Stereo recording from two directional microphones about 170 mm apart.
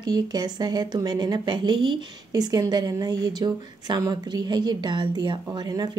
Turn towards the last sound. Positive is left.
turn(degrees=-25)  # may be behind; listen again after turning